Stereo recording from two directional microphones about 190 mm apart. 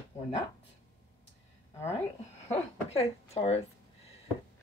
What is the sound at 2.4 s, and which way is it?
Speech, 35° left (ahead or behind).